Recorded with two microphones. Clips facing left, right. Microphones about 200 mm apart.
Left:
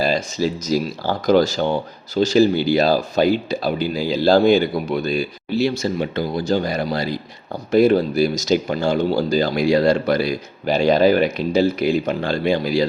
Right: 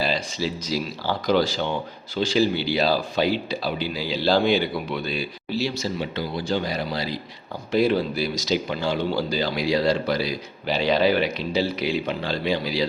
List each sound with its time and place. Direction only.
0.0 s speech: 45° left (ahead or behind)